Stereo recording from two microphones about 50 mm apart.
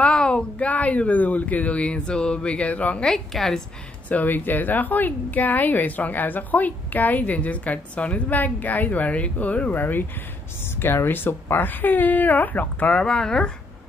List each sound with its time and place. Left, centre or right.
0.0 s speech: centre
3.1 s a woman's voice: centre
4.1 s speech: left
9.8 s speech: left
13.0 s a woman's voice: centre